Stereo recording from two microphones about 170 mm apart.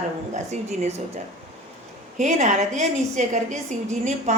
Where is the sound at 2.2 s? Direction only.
45° right (ahead or behind).